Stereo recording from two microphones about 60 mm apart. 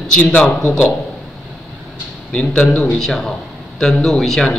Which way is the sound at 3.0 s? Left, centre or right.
Centre.